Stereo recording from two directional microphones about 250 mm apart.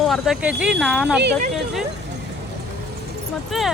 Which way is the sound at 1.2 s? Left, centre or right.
Right.